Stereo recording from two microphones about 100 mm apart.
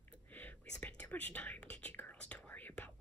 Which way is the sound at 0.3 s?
15° left (ahead or behind).